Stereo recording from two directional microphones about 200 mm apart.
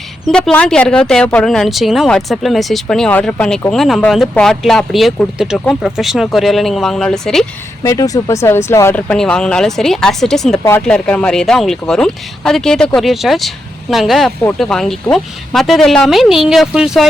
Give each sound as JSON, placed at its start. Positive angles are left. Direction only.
{"t": 0.3, "sound": "speech", "side_deg": 5}
{"t": 7.8, "sound": "speech", "side_deg": 20}